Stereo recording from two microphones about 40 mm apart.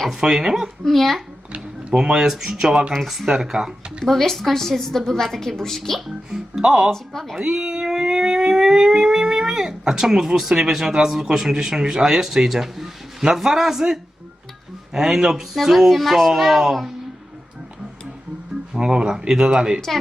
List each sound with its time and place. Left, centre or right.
0.1 s speech: centre
0.9 s a woman's voice: centre
2.0 s speech: centre
2.9 s speech: centre
3.3 s speech: centre
4.0 s a woman's voice: centre
6.6 s speech: right
6.9 s a woman's voice: centre
7.3 s speech: centre
18.7 s speech: right